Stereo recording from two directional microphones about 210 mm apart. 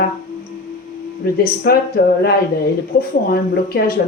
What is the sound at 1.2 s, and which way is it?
Speech, 45° left (ahead or behind).